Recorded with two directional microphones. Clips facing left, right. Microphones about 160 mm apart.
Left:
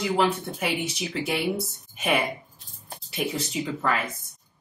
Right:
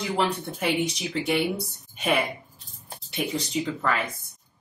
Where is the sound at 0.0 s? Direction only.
5° left (ahead or behind).